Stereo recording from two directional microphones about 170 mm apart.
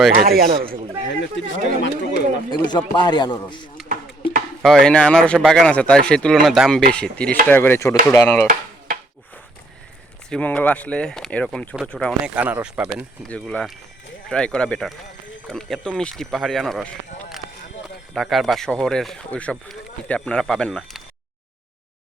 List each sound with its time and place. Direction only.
0.2 s speech: 60° right (ahead or behind)
1.2 s speech: 90° left
2.6 s speech: 25° left (ahead or behind)
4.6 s speech: centre (ahead or behind)
10.2 s speech: 5° left (ahead or behind)
12.2 s speech: 10° right (ahead or behind)
13.2 s speech: 5° left (ahead or behind)
18.1 s speech: centre (ahead or behind)